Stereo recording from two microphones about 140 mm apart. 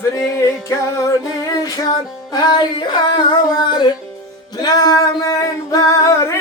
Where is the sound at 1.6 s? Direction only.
25° left (ahead or behind).